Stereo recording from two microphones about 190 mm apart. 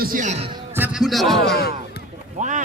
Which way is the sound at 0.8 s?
Centre (ahead or behind).